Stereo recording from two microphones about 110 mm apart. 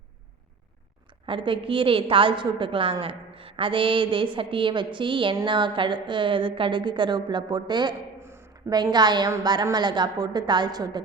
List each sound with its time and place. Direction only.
1.3 s a woman's voice: 50° right (ahead or behind)
8.2 s a sound: 20° right (ahead or behind)
8.5 s a woman's voice: 40° right (ahead or behind)